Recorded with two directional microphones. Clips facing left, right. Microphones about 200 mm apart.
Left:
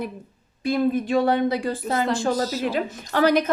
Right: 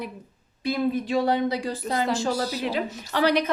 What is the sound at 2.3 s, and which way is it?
Speech, 15° right (ahead or behind).